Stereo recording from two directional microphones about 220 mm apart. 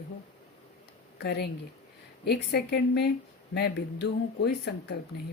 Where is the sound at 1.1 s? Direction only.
45° left (ahead or behind).